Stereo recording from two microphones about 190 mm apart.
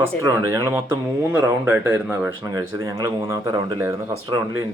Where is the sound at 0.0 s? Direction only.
15° right (ahead or behind).